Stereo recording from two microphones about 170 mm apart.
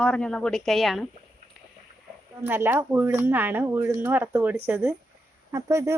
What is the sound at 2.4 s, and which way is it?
Speech, 10° right (ahead or behind).